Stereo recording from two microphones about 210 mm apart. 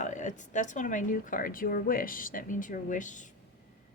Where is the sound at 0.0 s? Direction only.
35° left (ahead or behind).